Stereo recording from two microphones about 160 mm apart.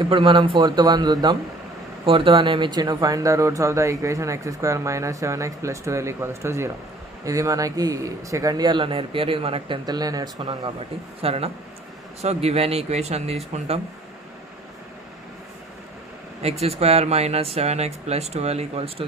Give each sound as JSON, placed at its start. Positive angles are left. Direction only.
{"t": 0.0, "sound": "speech", "side_deg": -35}
{"t": 9.8, "sound": "speech", "side_deg": -25}
{"t": 11.1, "sound": "speech", "side_deg": -40}
{"t": 16.4, "sound": "speech", "side_deg": -40}